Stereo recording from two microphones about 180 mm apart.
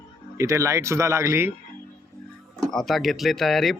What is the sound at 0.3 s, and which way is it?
Speech, 15° right (ahead or behind).